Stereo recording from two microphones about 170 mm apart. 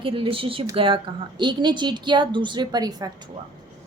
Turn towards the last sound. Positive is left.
turn(degrees=-25)  # may be behind; listen again after turning